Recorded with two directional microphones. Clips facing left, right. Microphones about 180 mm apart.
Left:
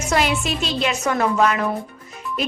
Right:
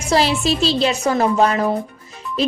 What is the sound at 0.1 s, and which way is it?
A woman's voice, 30° right (ahead or behind).